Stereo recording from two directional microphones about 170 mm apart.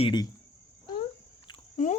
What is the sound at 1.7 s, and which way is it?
Speech, 50° left (ahead or behind).